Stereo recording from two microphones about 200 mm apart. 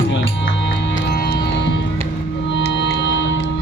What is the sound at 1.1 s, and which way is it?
Music, 55° left (ahead or behind).